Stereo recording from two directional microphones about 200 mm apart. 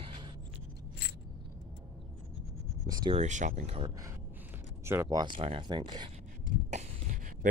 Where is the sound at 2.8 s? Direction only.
20° right (ahead or behind).